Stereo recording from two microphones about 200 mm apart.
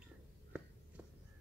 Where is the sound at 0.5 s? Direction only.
5° right (ahead or behind).